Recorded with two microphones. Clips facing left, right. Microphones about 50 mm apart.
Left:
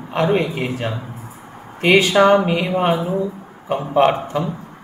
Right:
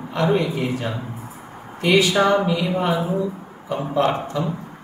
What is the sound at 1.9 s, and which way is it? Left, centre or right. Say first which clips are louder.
Speech: left 4 dB; left.